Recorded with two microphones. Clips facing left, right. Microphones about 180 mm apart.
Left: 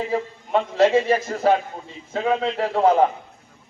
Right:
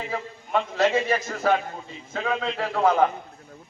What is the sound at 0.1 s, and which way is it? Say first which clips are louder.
A man's voice: left 1 dB; 30° left (ahead or behind).